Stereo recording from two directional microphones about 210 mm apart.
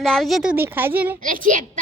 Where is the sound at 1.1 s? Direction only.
40° right (ahead or behind).